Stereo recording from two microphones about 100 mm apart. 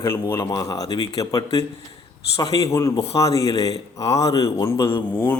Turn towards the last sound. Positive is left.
turn(degrees=20)  # may be behind; listen again after turning